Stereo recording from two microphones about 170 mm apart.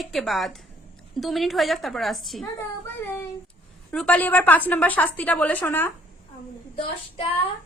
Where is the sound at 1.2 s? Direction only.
Centre (ahead or behind).